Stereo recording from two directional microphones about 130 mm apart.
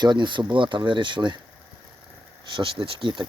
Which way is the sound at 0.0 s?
35° right (ahead or behind).